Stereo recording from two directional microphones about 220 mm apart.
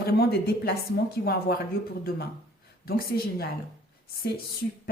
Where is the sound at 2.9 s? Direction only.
45° left (ahead or behind).